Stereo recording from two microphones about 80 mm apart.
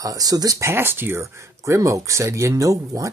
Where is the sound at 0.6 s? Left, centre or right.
Right.